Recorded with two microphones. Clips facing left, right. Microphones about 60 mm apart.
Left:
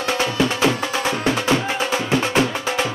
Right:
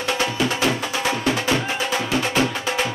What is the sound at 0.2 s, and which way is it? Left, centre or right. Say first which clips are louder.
Music: left 4 dB; left.